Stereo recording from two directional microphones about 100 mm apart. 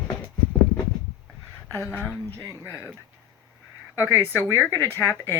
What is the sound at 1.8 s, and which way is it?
Speech, 20° left (ahead or behind).